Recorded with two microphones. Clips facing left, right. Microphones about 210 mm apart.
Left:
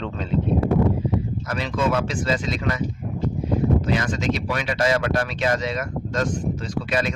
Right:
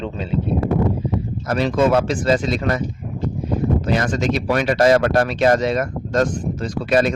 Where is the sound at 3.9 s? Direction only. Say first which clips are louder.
Right 4 dB; 45° right (ahead or behind).